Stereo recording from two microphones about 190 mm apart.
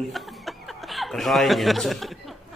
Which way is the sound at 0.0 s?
Centre (ahead or behind).